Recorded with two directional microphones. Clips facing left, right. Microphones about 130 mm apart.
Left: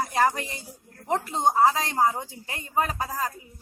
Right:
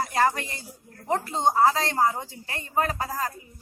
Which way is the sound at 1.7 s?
10° left (ahead or behind).